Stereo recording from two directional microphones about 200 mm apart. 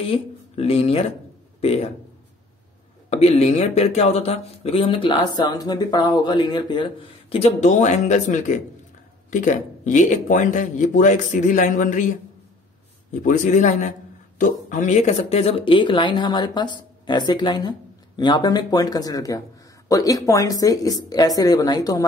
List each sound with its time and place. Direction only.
0.1 s speech: 30° left (ahead or behind)
3.1 s a man's voice: 30° left (ahead or behind)
13.2 s a man's voice: 40° left (ahead or behind); by 22.0 s 15° left (ahead or behind)